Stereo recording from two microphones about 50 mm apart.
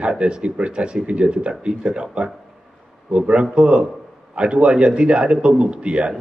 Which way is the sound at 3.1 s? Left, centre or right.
Right.